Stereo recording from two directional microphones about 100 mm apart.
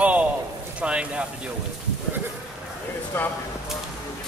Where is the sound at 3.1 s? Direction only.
20° left (ahead or behind).